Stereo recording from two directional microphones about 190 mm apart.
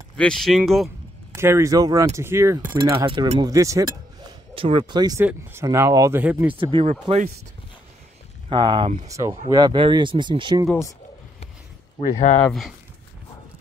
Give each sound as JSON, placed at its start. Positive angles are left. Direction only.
{"t": 0.2, "sound": "speech", "side_deg": 0}
{"t": 1.3, "sound": "speech", "side_deg": -15}
{"t": 4.6, "sound": "speech", "side_deg": -30}
{"t": 6.5, "sound": "speech", "side_deg": -30}
{"t": 8.5, "sound": "speech", "side_deg": -25}
{"t": 10.7, "sound": "speech", "side_deg": 15}